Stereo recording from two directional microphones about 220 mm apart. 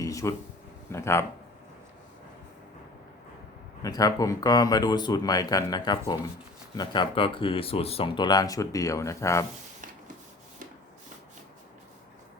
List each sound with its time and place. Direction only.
0.0 s a sound: 15° left (ahead or behind)
0.9 s speech: 10° left (ahead or behind)
3.8 s speech: 15° left (ahead or behind)